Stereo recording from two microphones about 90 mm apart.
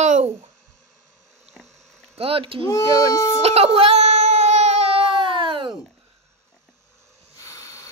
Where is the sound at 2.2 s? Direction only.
90° right.